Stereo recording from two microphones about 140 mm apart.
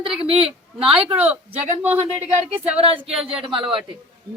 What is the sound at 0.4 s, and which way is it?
Speech, 10° right (ahead or behind).